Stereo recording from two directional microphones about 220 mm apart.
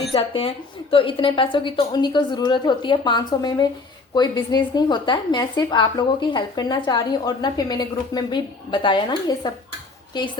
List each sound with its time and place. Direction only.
0.1 s a woman's voice: 25° left (ahead or behind)